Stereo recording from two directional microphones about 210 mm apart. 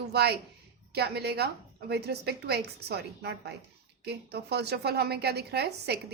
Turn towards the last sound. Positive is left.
turn(degrees=-50)  # may be behind; listen again after turning